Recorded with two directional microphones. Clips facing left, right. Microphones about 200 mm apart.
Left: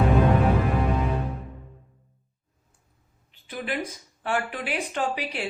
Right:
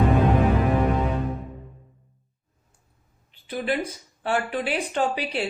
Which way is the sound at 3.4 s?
30° right (ahead or behind).